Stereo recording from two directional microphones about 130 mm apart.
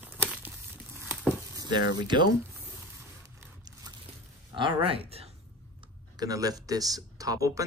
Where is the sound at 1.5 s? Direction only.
30° right (ahead or behind).